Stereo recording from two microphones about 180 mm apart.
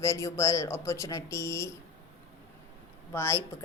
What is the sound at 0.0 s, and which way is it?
Speech, 15° left (ahead or behind).